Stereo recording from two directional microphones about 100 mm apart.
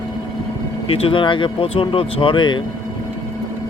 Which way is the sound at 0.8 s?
65° left (ahead or behind).